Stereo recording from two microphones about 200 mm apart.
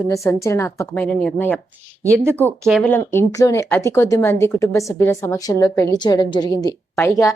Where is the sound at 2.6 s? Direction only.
5° left (ahead or behind).